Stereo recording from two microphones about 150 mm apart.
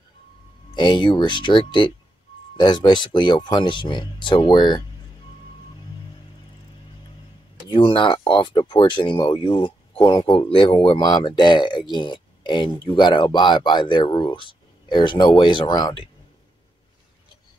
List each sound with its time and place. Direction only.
0.7 s speech: 30° left (ahead or behind)
7.6 s speech: 35° left (ahead or behind)